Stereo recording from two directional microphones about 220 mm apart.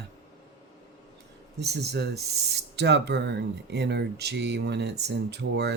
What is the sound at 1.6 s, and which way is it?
Speech, 50° right (ahead or behind).